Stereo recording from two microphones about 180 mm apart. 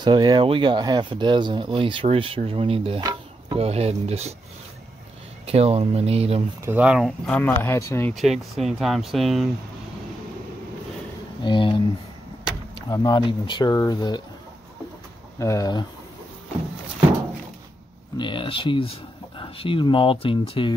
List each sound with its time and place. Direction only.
0.0 s speech: 25° right (ahead or behind)
5.5 s speech: 35° right (ahead or behind)
6.6 s speech: 10° right (ahead or behind); by 8.1 s 15° left (ahead or behind)
8.1 s speech: centre (ahead or behind)
11.4 s speech: 25° left (ahead or behind)
12.9 s speech: 25° left (ahead or behind)
15.3 s speech: 15° left (ahead or behind)
18.1 s speech: 25° left (ahead or behind)